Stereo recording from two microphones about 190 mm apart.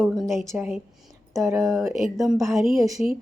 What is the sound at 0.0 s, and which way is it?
A woman's voice, centre (ahead or behind).